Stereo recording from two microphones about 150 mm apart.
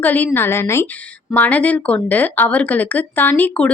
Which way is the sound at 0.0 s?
10° left (ahead or behind).